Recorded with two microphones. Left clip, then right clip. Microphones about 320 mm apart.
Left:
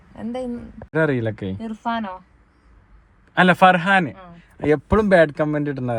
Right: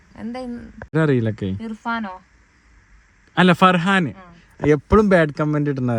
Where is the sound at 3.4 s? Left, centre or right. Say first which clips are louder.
Left 1 dB; right.